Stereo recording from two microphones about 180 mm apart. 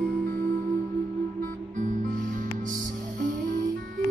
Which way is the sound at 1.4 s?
45° right (ahead or behind).